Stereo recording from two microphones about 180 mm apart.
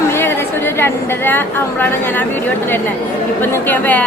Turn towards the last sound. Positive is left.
turn(degrees=10)  # may be behind; listen again after turning